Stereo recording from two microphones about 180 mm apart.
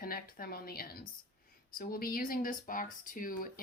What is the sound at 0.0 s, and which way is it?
A woman's voice, 55° left (ahead or behind).